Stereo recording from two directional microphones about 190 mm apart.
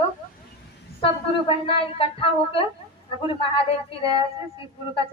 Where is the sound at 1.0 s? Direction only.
30° left (ahead or behind).